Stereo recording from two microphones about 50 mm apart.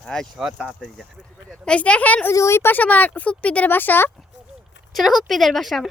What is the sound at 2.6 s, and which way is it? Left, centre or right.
Speech, left.